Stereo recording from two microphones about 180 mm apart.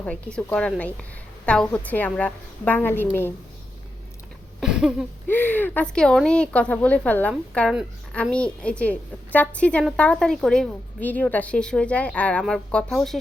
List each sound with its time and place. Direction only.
0.0 s a woman's voice: 5° left (ahead or behind)
4.6 s a sound: 5° right (ahead or behind)
5.3 s a woman's voice: 10° left (ahead or behind)